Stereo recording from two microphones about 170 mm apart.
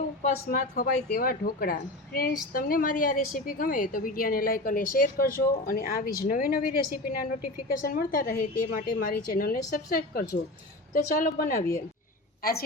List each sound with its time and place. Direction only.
0.2 s a woman's voice: 60° left (ahead or behind)